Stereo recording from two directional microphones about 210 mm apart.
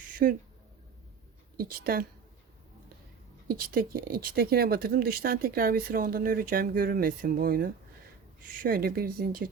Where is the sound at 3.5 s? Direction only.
45° right (ahead or behind).